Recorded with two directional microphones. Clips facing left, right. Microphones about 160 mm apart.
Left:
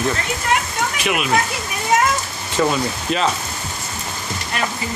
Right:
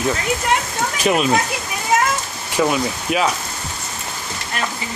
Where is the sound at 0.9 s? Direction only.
35° right (ahead or behind).